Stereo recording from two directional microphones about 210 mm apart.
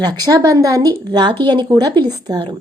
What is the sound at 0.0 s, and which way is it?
A woman's voice, 15° right (ahead or behind).